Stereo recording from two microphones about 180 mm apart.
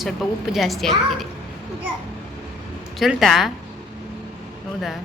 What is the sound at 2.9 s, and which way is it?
Speech, centre (ahead or behind).